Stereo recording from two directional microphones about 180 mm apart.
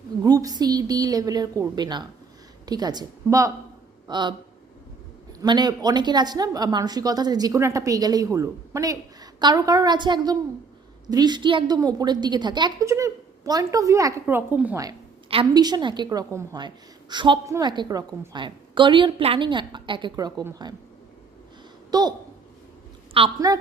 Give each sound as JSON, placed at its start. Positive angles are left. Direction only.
{"t": 0.2, "sound": "a woman's voice", "side_deg": -20}
{"t": 5.4, "sound": "a woman's voice", "side_deg": -25}
{"t": 15.3, "sound": "a woman's voice", "side_deg": -25}
{"t": 21.8, "sound": "speech", "side_deg": -20}
{"t": 23.2, "sound": "a woman's voice", "side_deg": -30}